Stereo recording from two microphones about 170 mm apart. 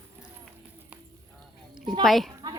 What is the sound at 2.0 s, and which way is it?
Speech, centre (ahead or behind).